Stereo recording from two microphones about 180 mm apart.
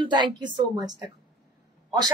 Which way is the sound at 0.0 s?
25° right (ahead or behind).